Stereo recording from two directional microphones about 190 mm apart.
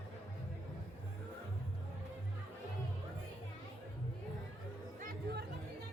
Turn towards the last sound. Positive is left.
turn(degrees=-50)  # may be behind; listen again after turning